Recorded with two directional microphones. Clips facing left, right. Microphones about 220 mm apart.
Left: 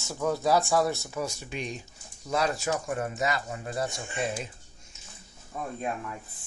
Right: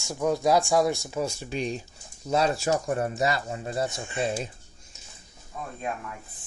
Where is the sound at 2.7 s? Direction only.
40° right (ahead or behind).